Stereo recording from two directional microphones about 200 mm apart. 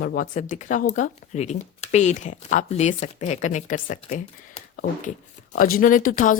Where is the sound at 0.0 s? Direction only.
50° left (ahead or behind).